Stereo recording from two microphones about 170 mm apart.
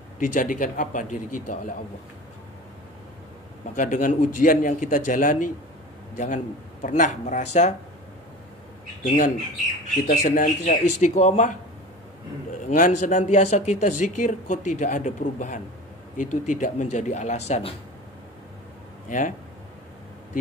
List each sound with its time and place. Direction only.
0.2 s speech: 50° left (ahead or behind)
3.7 s speech: 50° left (ahead or behind)
9.0 s speech: 55° left (ahead or behind)
12.6 s speech: 50° left (ahead or behind)
19.0 s speech: 50° left (ahead or behind)